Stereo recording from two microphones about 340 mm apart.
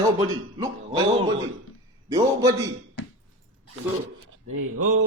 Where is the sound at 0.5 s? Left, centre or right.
Centre.